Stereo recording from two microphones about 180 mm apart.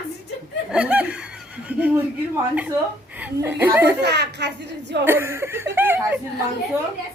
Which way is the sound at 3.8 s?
70° right (ahead or behind).